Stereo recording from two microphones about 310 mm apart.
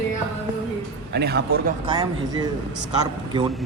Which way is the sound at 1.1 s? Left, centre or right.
Right.